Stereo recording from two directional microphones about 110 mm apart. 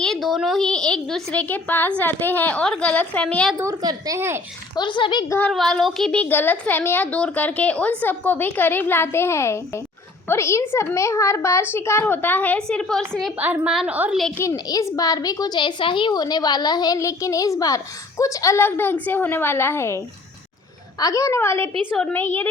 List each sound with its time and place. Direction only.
0.0 s a woman's voice: centre (ahead or behind)
3.6 s a woman's voice: 35° right (ahead or behind)
4.7 s speech: 45° left (ahead or behind)
5.5 s speech: 5° left (ahead or behind)
6.2 s a woman's voice: 15° left (ahead or behind)
13.4 s a woman's voice: 15° right (ahead or behind)
14.5 s a woman's voice: 35° left (ahead or behind)
21.0 s a woman's voice: 30° left (ahead or behind)